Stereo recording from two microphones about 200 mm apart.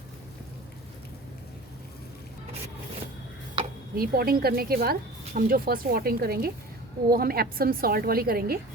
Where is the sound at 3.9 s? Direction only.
45° right (ahead or behind).